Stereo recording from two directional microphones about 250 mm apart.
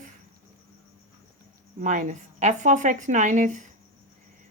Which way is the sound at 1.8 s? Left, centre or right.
Right.